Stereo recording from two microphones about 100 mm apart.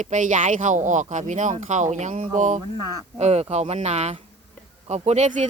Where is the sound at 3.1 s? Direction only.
90° right.